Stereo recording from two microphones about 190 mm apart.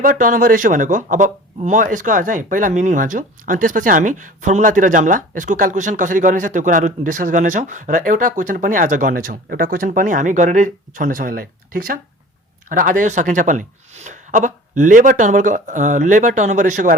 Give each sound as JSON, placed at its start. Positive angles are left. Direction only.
{"t": 0.0, "sound": "speech", "side_deg": -45}